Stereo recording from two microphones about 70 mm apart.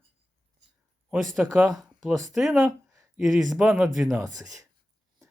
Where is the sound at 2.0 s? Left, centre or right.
Centre.